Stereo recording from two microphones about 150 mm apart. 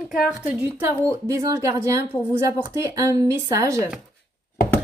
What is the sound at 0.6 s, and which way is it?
A woman's voice, 20° right (ahead or behind).